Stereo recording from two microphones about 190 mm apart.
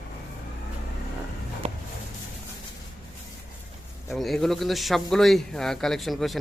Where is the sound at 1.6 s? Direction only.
35° right (ahead or behind).